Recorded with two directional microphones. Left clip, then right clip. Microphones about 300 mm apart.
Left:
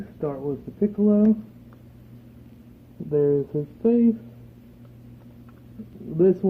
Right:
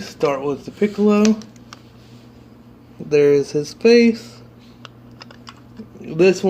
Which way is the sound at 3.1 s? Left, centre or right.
Right.